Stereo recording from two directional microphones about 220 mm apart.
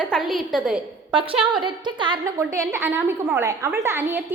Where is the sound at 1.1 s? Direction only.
25° right (ahead or behind).